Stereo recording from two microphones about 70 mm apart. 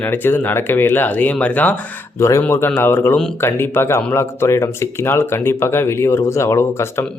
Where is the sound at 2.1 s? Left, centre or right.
Left.